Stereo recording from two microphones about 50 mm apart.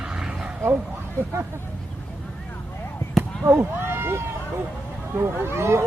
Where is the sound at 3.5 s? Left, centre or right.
Right.